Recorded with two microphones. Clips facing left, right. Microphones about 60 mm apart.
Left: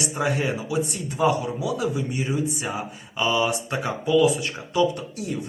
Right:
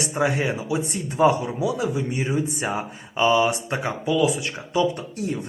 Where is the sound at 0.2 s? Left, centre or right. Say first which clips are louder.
Right 2 dB; right.